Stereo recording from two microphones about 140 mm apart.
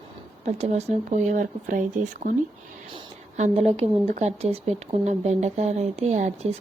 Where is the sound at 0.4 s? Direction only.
50° right (ahead or behind).